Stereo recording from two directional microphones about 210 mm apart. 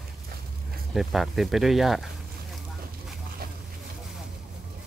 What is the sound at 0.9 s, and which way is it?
Speech, centre (ahead or behind).